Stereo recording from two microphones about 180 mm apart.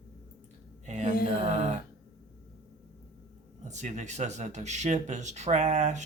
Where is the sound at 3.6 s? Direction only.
40° right (ahead or behind).